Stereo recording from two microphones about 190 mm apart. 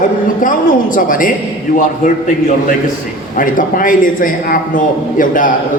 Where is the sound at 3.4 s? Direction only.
45° left (ahead or behind).